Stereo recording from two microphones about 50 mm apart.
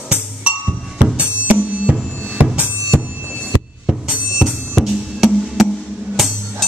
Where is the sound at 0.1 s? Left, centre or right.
Right.